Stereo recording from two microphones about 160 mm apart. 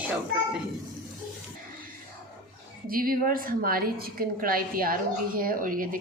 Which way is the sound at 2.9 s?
65° right (ahead or behind).